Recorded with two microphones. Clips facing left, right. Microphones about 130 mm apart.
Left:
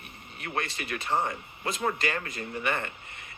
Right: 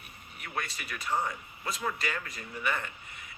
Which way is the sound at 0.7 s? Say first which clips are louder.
Left 3 dB; 60° left (ahead or behind).